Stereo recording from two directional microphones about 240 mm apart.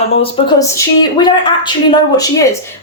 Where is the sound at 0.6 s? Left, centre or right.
Centre.